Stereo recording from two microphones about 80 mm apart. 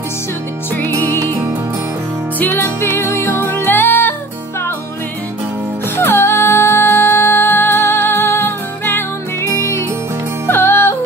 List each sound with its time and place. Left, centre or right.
0.7 s music: left
2.3 s music: left
5.9 s music: left